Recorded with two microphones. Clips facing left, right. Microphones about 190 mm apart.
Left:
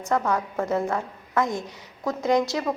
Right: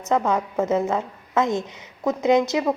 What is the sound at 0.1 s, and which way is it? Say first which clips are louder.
A woman's voice: right 3 dB; 15° right (ahead or behind).